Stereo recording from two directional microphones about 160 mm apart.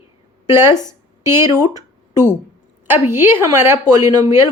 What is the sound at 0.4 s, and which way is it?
A woman's voice, 15° right (ahead or behind).